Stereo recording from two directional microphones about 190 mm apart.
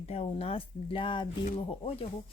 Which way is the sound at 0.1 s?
30° left (ahead or behind).